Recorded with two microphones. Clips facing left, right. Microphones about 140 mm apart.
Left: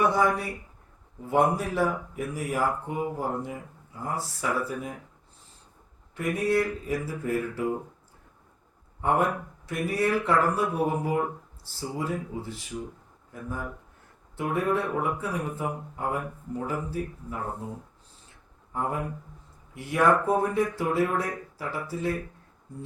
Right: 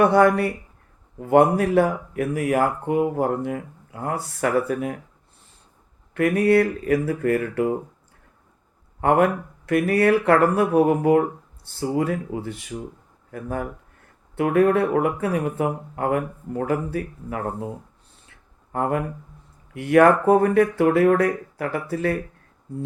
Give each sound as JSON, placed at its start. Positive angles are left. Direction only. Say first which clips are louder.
{"t": 0.0, "sound": "speech", "louder": "right 8 dB", "side_deg": -65}
{"t": 6.1, "sound": "speech", "louder": "right 8 dB", "side_deg": -70}
{"t": 9.0, "sound": "speech", "louder": "right 7 dB", "side_deg": -70}
{"t": 18.3, "sound": "a sound", "louder": "right 9 dB", "side_deg": -70}
{"t": 19.7, "sound": "speech", "louder": "right 8 dB", "side_deg": -70}